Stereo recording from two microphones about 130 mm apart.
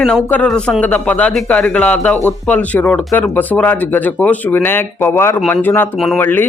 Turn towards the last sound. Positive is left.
turn(degrees=15)  # may be behind; listen again after turning